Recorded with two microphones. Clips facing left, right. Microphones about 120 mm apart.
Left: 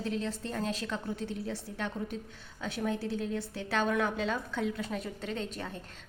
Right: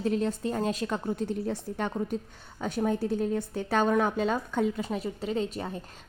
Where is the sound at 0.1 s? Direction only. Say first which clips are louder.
Right 6 dB; 45° right (ahead or behind).